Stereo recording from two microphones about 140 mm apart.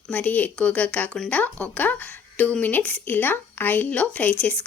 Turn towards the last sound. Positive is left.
turn(degrees=10)  # may be behind; listen again after turning